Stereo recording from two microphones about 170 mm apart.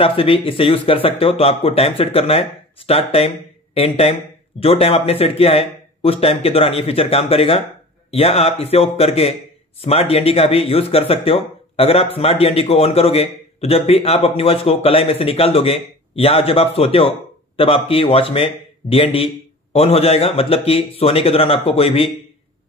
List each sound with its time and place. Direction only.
0.0 s speech: 35° left (ahead or behind)